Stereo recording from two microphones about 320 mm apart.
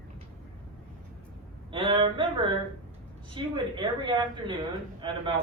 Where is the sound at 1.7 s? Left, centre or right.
Centre.